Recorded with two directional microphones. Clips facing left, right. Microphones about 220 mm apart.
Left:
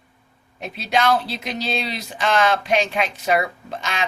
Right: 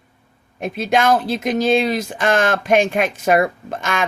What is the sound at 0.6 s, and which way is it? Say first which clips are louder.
Speech: right 4 dB; 50° right (ahead or behind).